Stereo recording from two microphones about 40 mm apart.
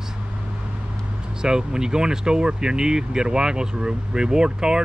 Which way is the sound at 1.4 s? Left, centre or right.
Centre.